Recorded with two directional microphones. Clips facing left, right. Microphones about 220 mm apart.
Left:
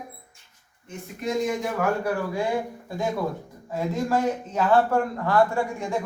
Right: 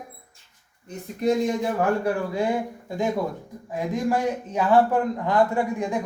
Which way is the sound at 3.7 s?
15° right (ahead or behind).